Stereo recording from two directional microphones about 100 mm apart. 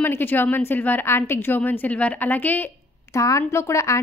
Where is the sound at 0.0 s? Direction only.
20° left (ahead or behind).